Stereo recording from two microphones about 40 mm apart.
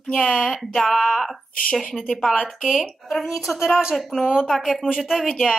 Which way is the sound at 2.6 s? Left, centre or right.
Centre.